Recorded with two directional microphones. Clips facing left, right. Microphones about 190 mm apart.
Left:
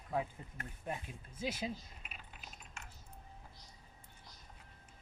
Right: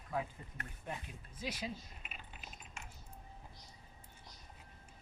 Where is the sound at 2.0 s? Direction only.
Centre (ahead or behind).